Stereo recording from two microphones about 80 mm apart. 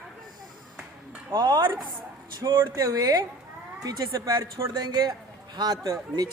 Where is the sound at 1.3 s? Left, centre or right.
Right.